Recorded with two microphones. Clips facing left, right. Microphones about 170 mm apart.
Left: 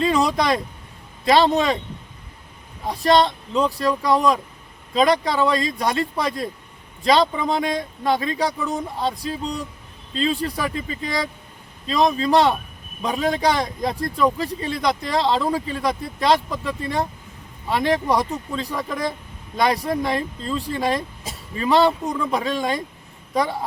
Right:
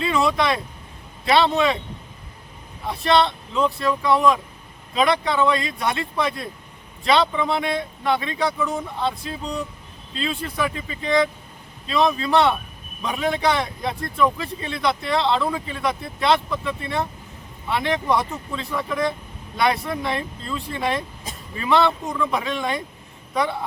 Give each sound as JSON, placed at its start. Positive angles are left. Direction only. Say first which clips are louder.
{"t": 0.0, "sound": "vehicle", "louder": "left 1 dB", "side_deg": 40}
{"t": 1.2, "sound": "a man's voice", "louder": "left 1 dB", "side_deg": 40}
{"t": 2.8, "sound": "a man's voice", "louder": "left 2 dB", "side_deg": 40}